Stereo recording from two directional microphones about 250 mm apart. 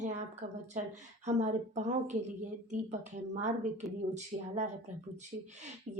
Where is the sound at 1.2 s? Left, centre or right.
Right.